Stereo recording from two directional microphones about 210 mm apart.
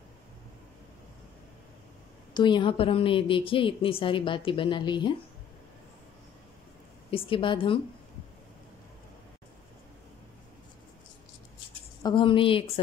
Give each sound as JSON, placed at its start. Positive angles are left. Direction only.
{"t": 2.3, "sound": "a woman's voice", "side_deg": 20}
{"t": 7.1, "sound": "a woman's voice", "side_deg": 25}
{"t": 12.0, "sound": "a woman's voice", "side_deg": 20}